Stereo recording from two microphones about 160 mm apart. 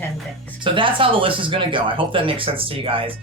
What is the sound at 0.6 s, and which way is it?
Speech, 30° right (ahead or behind).